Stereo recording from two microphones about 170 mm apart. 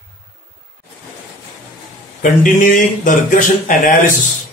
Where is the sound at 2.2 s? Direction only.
50° left (ahead or behind).